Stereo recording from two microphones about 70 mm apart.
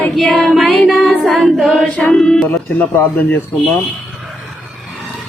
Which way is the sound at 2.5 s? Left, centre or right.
Left.